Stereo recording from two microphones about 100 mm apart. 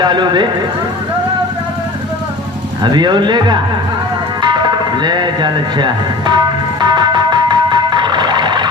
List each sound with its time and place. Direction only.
0.0 s speech: 50° right (ahead or behind)
2.8 s speech: 45° right (ahead or behind)
4.4 s music: 45° right (ahead or behind)